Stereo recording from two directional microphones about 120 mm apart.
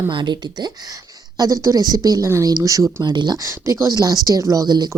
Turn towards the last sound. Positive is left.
turn(degrees=-35)  # may be behind; listen again after turning